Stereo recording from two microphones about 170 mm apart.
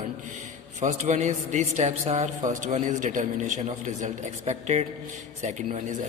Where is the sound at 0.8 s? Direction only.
45° right (ahead or behind).